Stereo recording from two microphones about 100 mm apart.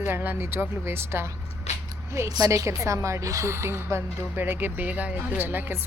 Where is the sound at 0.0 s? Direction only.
20° right (ahead or behind).